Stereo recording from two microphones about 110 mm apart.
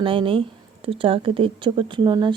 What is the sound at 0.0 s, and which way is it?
Speech, 50° right (ahead or behind).